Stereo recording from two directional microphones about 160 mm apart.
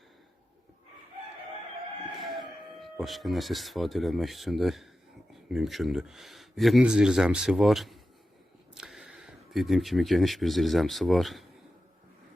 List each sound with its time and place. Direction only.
2.1 s chicken: centre (ahead or behind)
3.0 s speech: centre (ahead or behind)